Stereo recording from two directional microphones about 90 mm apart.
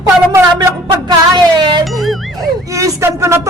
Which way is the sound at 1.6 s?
55° right (ahead or behind).